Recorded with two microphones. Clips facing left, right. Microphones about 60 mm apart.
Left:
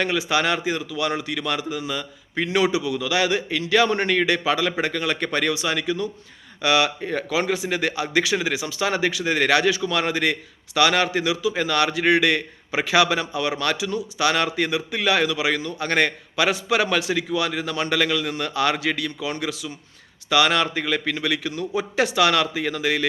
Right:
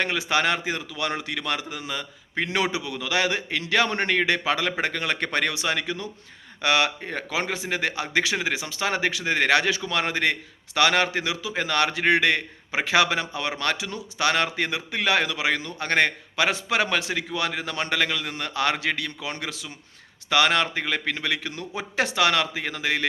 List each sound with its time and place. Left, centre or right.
0.0 s a man's voice: right
7.1 s a man's voice: right